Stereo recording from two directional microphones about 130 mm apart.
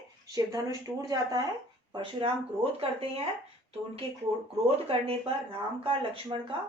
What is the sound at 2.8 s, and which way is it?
Speech, 50° right (ahead or behind).